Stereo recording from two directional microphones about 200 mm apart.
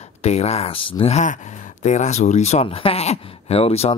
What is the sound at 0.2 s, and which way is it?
Speech, 30° left (ahead or behind).